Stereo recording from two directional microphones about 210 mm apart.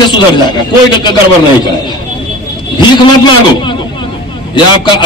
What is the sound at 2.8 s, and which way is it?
A man's voice, 20° left (ahead or behind).